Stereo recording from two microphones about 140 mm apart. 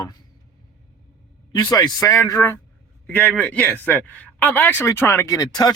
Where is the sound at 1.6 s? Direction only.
30° left (ahead or behind).